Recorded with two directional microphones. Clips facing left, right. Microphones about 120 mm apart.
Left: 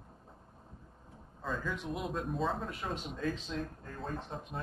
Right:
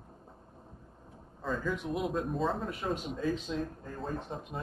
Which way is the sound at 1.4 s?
Centre (ahead or behind).